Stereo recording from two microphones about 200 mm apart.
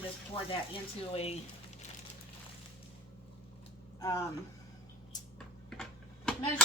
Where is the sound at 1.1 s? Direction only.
30° left (ahead or behind).